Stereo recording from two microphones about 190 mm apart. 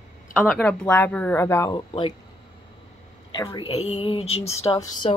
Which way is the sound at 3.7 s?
30° left (ahead or behind).